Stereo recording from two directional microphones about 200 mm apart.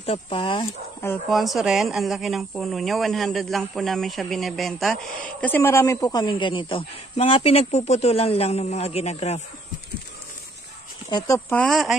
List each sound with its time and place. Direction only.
0.0 s speech: 30° left (ahead or behind)
1.3 s speech: centre (ahead or behind)
5.4 s speech: 10° left (ahead or behind); by 9.4 s 30° left (ahead or behind)
11.1 s speech: 20° left (ahead or behind)
11.6 s speech: centre (ahead or behind)